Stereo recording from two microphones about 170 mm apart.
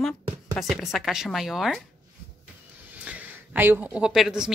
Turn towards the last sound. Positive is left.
turn(degrees=-5)  # may be behind; listen again after turning